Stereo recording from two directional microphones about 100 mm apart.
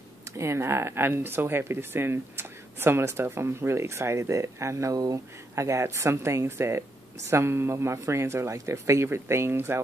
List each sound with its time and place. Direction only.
0.4 s speech: 30° right (ahead or behind)